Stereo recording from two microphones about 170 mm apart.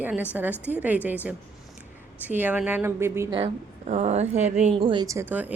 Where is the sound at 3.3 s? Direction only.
35° right (ahead or behind).